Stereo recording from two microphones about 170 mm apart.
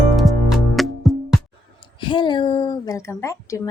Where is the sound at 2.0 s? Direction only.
30° left (ahead or behind).